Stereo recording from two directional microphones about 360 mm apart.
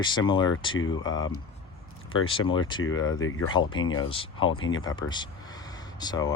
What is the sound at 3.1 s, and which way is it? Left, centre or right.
Speech, left.